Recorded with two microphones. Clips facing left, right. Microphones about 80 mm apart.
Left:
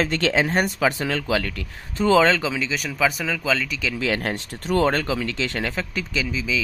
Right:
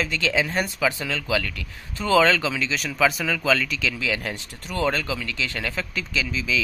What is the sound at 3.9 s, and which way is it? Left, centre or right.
Speech, left.